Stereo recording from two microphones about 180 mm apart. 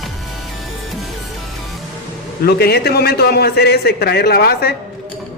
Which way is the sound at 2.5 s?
60° left (ahead or behind).